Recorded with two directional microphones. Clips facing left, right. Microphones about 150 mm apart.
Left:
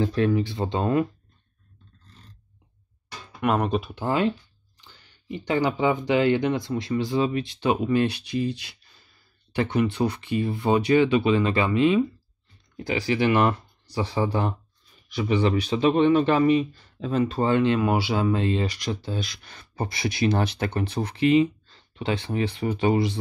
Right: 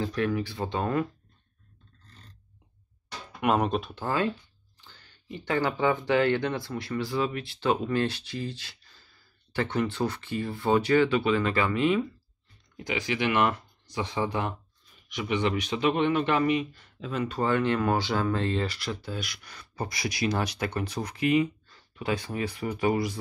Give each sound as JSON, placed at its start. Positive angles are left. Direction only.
{"t": 0.0, "sound": "speech", "side_deg": 30}
{"t": 3.3, "sound": "speech", "side_deg": 0}
{"t": 3.9, "sound": "speech", "side_deg": 20}
{"t": 12.7, "sound": "speech", "side_deg": 35}